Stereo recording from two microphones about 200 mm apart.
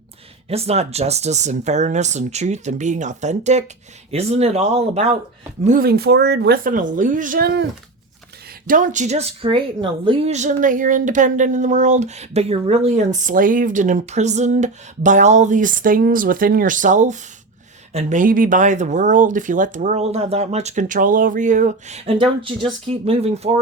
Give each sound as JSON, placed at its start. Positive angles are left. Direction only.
{"t": 0.4, "sound": "speech", "side_deg": -30}
{"t": 5.6, "sound": "a woman's voice", "side_deg": -45}
{"t": 8.6, "sound": "speech", "side_deg": -40}